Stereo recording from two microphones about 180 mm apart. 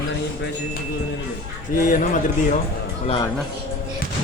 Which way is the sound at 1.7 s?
45° left (ahead or behind).